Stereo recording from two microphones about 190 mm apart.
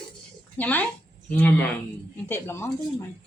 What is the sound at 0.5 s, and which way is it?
Speech, 10° left (ahead or behind).